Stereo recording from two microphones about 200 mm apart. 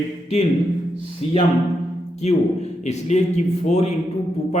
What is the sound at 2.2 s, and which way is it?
Speech, 35° left (ahead or behind).